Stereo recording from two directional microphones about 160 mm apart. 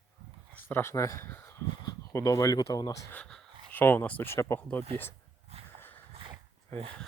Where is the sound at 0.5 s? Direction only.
15° left (ahead or behind).